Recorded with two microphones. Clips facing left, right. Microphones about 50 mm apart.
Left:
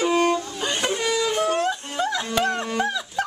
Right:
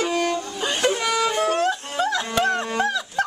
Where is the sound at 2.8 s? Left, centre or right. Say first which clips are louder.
Right 2 dB; centre.